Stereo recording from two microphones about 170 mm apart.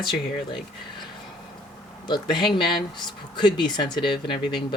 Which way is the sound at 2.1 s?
25° left (ahead or behind).